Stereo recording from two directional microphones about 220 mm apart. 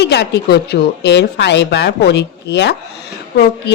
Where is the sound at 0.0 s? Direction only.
50° left (ahead or behind).